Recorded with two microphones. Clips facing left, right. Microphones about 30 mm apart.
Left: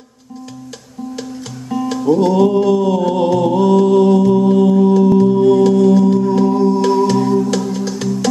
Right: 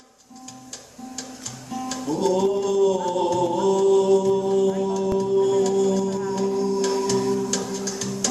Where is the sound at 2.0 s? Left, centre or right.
Left.